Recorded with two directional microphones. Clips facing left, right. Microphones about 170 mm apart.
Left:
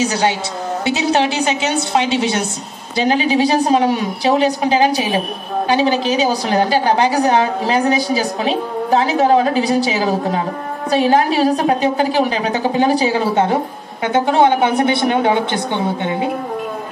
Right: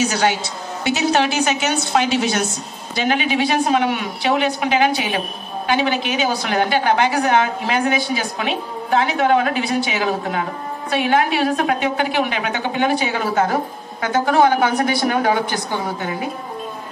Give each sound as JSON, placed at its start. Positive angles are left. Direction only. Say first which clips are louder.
{"t": 0.0, "sound": "a woman's voice", "louder": "left 2 dB", "side_deg": 30}